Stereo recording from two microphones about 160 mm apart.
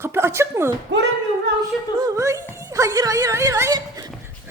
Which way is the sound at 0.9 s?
90° right.